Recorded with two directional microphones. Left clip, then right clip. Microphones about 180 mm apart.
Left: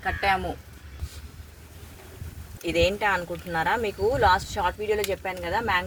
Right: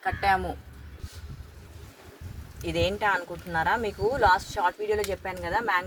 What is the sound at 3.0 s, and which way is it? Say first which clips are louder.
Speech: left 1 dB; 30° left (ahead or behind).